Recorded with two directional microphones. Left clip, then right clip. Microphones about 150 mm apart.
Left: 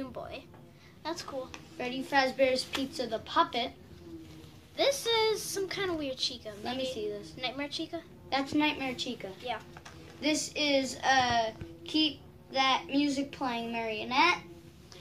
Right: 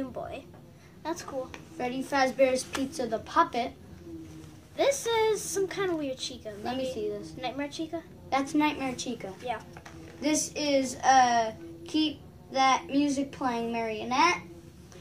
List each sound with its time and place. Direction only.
0.0 s a woman's voice: 10° right (ahead or behind)
1.0 s a woman's voice: 20° right (ahead or behind)
1.8 s speech: 5° left (ahead or behind)
4.7 s a woman's voice: 15° right (ahead or behind)
7.0 s speech: centre (ahead or behind)
7.3 s a woman's voice: 15° right (ahead or behind)
8.3 s speech: centre (ahead or behind)